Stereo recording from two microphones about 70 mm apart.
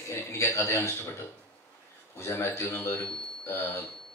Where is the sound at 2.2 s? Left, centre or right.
Left.